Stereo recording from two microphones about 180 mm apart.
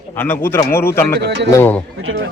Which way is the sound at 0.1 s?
10° left (ahead or behind).